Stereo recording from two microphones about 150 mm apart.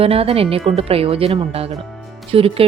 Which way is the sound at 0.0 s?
40° right (ahead or behind).